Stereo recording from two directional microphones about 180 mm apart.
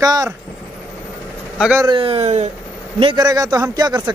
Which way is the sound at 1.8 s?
30° right (ahead or behind).